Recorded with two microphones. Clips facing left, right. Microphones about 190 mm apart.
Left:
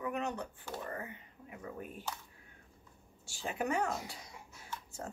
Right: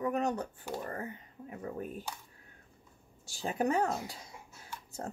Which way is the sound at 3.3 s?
35° right (ahead or behind).